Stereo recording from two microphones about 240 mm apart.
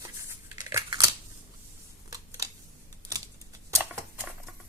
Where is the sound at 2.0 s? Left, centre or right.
Centre.